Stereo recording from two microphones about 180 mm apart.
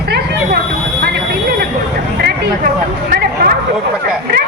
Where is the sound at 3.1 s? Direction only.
55° right (ahead or behind).